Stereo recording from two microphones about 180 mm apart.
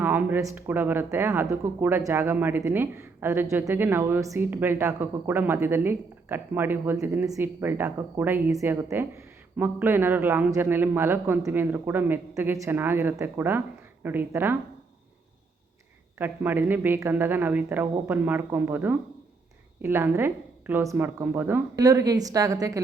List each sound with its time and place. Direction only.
0.0 s speech: 10° right (ahead or behind)
16.1 s speech: 10° right (ahead or behind)